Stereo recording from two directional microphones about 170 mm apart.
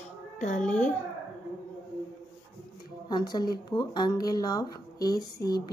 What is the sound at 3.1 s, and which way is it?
Speech, 25° left (ahead or behind).